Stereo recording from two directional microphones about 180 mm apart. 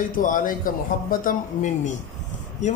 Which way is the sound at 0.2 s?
50° left (ahead or behind).